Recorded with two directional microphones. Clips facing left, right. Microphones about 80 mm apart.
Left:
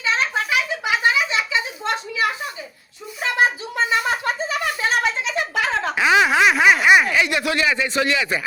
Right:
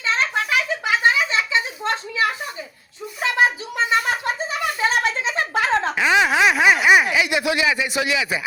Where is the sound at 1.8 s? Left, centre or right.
Right.